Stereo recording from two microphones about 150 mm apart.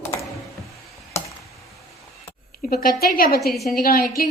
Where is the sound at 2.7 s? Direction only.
85° left.